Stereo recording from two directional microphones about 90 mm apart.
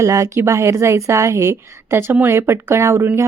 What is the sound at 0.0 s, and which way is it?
A woman's voice, 35° right (ahead or behind).